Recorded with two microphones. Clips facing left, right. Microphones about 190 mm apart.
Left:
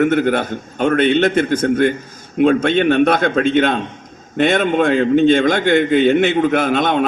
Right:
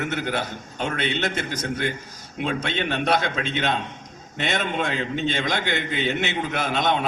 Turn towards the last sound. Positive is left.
turn(degrees=50)  # may be behind; listen again after turning